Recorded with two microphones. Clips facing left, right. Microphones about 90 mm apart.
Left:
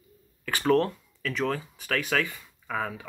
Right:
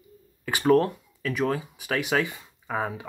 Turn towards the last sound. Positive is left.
turn(degrees=-25)  # may be behind; listen again after turning